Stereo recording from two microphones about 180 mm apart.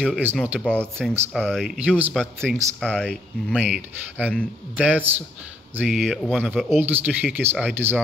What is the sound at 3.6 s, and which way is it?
Speech, 5° right (ahead or behind).